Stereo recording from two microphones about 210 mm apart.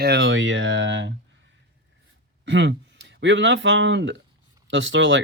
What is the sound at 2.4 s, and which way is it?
Speech, 60° right (ahead or behind).